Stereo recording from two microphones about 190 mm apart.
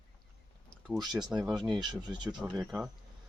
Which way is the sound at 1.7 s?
20° right (ahead or behind).